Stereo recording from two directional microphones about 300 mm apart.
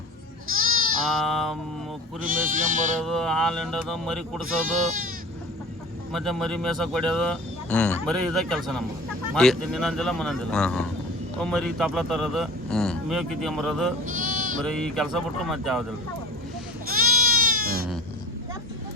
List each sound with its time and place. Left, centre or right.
0.5 s sheep: right
1.2 s speech: centre
2.2 s speech: right
3.0 s speech: centre
4.4 s speech: right
6.1 s speech: centre
14.1 s sheep: right
14.6 s speech: centre
16.9 s goat: right